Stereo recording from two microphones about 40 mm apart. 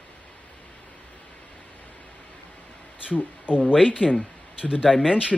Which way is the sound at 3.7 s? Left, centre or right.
Centre.